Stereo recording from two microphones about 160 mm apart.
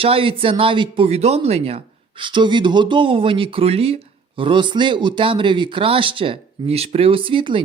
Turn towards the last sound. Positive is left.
turn(degrees=-30)  # may be behind; listen again after turning